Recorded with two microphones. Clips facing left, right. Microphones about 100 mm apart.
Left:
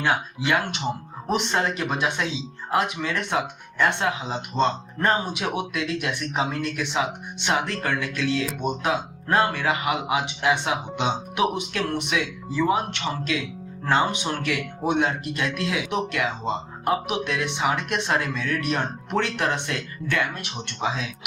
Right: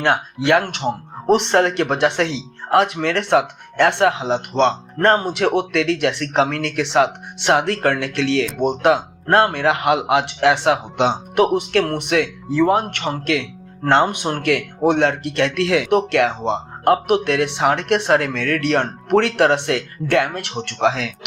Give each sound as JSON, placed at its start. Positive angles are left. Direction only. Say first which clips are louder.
{"t": 0.0, "sound": "speech", "louder": "right 6 dB", "side_deg": -65}